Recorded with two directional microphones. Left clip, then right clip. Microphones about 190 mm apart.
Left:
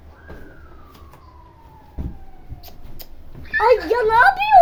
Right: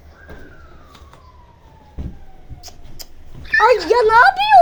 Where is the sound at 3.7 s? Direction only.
25° right (ahead or behind).